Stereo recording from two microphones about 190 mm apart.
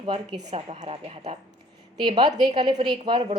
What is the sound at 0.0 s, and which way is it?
Speech, 25° right (ahead or behind).